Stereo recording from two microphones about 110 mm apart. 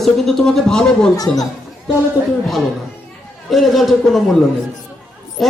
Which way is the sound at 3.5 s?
Centre (ahead or behind).